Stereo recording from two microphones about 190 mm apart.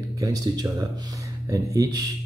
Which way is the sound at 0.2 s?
20° right (ahead or behind).